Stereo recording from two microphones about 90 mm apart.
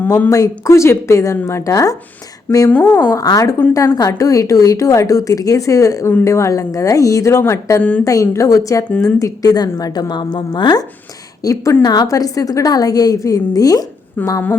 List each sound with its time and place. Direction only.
0.3 s a woman's voice: 35° left (ahead or behind)
2.6 s speech: 15° left (ahead or behind)
3.1 s a woman's voice: 45° left (ahead or behind)
7.8 s speech: 15° left (ahead or behind)
8.0 s a woman's voice: 35° left (ahead or behind)
11.4 s a woman's voice: 40° left (ahead or behind)
14.2 s a woman's voice: 20° left (ahead or behind)